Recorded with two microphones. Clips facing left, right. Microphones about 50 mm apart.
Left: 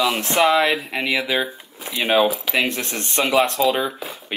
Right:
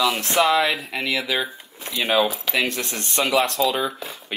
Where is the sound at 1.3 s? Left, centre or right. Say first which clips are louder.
Left 2 dB; centre.